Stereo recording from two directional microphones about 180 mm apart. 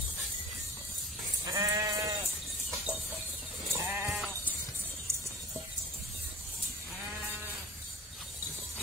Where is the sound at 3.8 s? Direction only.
15° right (ahead or behind).